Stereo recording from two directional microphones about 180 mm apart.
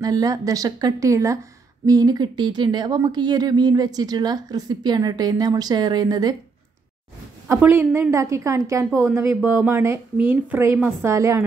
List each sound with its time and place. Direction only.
0.0 s speech: 20° right (ahead or behind)
7.4 s speech: 10° right (ahead or behind)